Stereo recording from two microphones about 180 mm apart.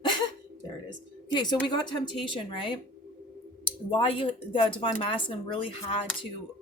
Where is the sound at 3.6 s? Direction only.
30° left (ahead or behind).